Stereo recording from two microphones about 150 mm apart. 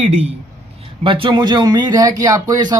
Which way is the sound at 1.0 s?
35° right (ahead or behind).